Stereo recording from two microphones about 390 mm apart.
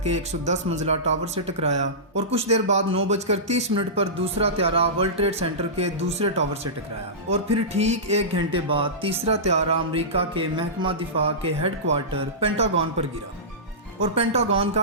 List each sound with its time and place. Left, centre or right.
0.0 s speech: centre
14.0 s speech: centre